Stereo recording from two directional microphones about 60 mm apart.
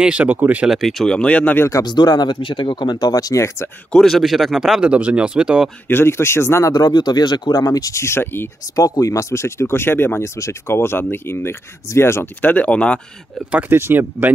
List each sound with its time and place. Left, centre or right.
0.0 s speech: right
0.7 s speech: centre
1.0 s speech: centre
1.7 s speech: left
3.3 s speech: left
4.0 s speech: centre
4.8 s speech: centre
5.9 s speech: left
6.6 s speech: left
8.0 s speech: left
8.7 s speech: left
10.3 s speech: left
12.4 s speech: left
13.7 s speech: right